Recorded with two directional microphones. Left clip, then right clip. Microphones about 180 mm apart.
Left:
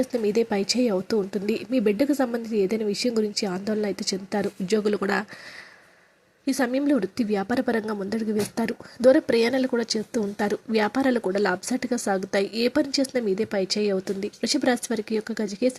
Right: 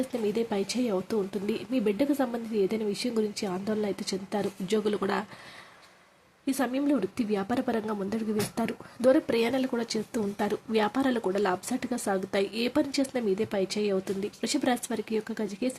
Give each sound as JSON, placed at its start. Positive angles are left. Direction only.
{"t": 0.1, "sound": "a woman's voice", "side_deg": 20}
{"t": 6.4, "sound": "a woman's voice", "side_deg": 20}